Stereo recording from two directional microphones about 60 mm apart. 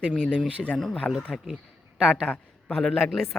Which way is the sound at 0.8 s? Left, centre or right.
Centre.